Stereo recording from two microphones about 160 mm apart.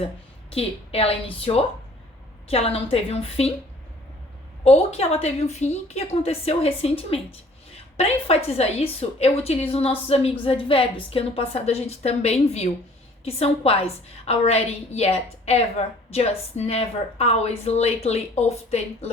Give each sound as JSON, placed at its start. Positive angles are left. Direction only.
{"t": 0.5, "sound": "a woman's voice", "side_deg": 35}
{"t": 4.6, "sound": "a woman's voice", "side_deg": 40}